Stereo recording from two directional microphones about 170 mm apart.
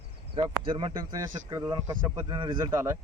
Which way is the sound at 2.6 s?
20° right (ahead or behind).